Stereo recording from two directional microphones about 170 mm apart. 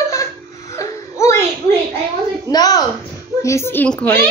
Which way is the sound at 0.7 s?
15° left (ahead or behind).